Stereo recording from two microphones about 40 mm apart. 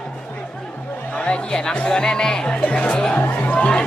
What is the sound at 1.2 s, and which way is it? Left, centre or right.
Chatter, left.